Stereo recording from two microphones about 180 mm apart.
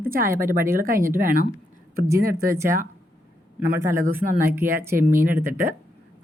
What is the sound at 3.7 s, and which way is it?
Speech, 15° right (ahead or behind).